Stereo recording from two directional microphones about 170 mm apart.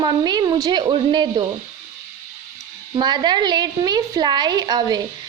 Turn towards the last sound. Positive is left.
turn(degrees=-25)  # may be behind; listen again after turning